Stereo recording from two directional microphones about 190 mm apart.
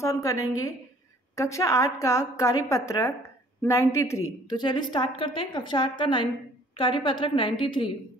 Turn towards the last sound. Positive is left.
turn(degrees=25)  # may be behind; listen again after turning